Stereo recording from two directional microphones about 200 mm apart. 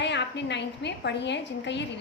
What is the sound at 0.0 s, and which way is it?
A woman's voice, 60° left (ahead or behind).